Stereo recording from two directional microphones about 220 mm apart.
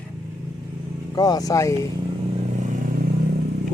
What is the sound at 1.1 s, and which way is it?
Speech, 15° left (ahead or behind).